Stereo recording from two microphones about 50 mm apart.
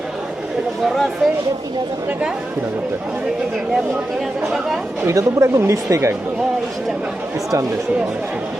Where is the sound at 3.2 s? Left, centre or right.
Centre.